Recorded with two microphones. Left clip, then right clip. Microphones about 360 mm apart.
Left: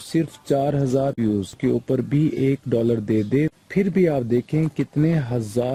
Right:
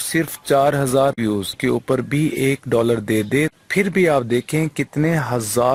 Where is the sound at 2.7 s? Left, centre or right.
Right.